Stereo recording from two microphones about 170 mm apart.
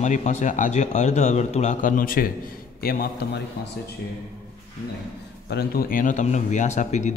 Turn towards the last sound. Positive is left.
turn(degrees=45)  # may be behind; listen again after turning